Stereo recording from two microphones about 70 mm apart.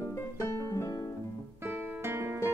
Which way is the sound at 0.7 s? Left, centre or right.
Left.